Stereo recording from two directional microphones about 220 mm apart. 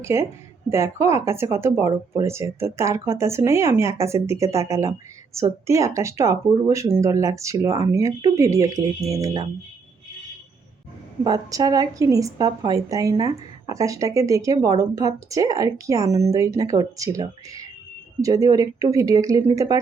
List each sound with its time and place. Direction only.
0.0 s speech: 10° right (ahead or behind)
11.2 s speech: 15° right (ahead or behind)